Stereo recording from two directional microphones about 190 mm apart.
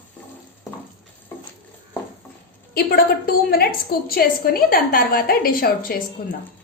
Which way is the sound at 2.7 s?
55° left (ahead or behind).